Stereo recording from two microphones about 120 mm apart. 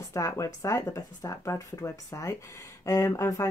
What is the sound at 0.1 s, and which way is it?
Speech, 25° left (ahead or behind).